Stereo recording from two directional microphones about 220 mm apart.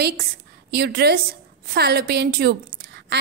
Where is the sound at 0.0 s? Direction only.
45° right (ahead or behind).